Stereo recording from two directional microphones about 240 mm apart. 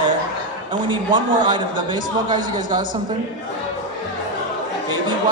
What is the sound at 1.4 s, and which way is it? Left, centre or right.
A man's voice, centre.